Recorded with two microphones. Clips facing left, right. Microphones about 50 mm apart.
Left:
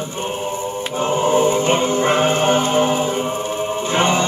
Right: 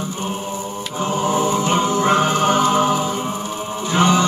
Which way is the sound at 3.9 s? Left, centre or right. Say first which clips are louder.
Right 2 dB; left.